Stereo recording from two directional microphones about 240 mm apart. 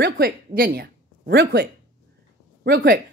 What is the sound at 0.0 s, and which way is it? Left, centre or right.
A woman's voice, right.